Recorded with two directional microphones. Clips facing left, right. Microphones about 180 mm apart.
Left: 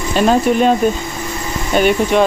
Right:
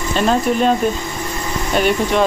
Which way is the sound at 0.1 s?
5° left (ahead or behind).